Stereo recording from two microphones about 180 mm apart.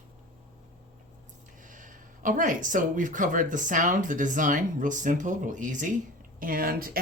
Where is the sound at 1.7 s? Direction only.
45° right (ahead or behind).